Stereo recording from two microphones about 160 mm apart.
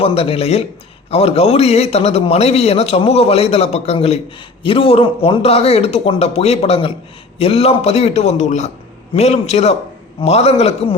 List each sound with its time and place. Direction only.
0.0 s a man's voice: 35° left (ahead or behind)